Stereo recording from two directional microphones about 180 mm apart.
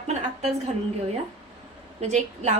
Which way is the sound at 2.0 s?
40° right (ahead or behind).